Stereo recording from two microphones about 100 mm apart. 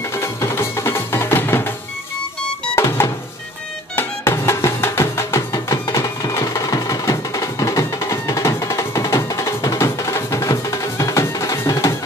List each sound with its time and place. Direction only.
0.2 s music: 25° left (ahead or behind)
2.7 s music: 25° left (ahead or behind)